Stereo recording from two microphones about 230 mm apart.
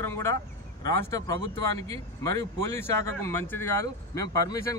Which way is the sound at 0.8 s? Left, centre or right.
Centre.